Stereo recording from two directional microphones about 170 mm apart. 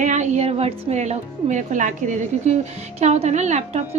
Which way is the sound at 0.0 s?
45° right (ahead or behind).